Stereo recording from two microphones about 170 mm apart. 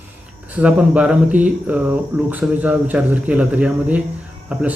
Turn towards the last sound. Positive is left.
turn(degrees=-10)  # may be behind; listen again after turning